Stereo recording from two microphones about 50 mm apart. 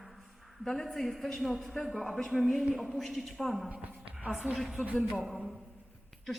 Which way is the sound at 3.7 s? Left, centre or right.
Right.